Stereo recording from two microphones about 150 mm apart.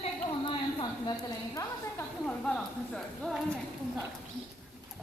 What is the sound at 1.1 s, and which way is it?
Speech, 20° left (ahead or behind).